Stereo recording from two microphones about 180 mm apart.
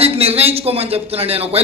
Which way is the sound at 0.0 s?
35° right (ahead or behind).